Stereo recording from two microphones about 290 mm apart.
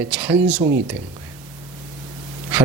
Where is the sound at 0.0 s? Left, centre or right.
Centre.